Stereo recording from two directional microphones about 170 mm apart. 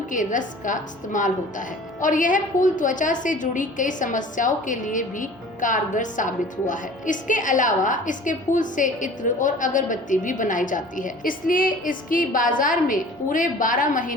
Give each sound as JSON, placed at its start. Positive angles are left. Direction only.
{"t": 0.1, "sound": "a woman's voice", "side_deg": 50}